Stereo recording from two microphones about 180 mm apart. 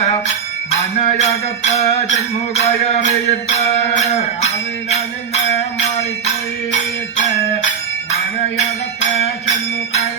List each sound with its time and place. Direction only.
0.9 s music: 35° left (ahead or behind)
8.5 s music: 35° left (ahead or behind)